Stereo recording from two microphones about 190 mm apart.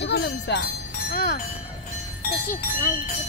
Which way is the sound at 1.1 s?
45° left (ahead or behind).